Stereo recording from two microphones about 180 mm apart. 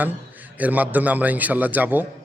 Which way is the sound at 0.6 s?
10° right (ahead or behind).